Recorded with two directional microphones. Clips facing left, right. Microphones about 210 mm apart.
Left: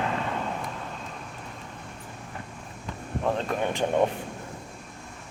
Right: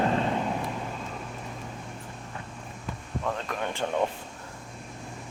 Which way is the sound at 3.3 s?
30° left (ahead or behind).